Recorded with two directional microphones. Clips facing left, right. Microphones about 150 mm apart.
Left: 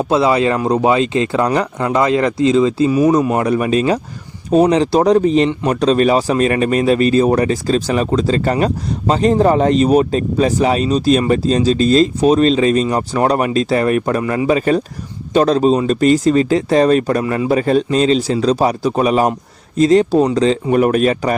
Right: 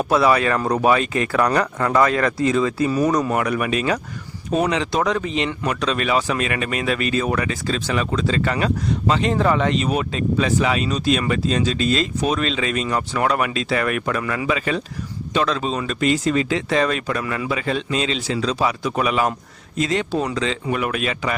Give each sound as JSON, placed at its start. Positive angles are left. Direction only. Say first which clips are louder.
{"t": 0.0, "sound": "speech", "louder": "left 3 dB", "side_deg": 25}